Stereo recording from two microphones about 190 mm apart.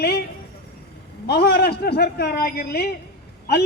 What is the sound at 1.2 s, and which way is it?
Speech, 60° left (ahead or behind).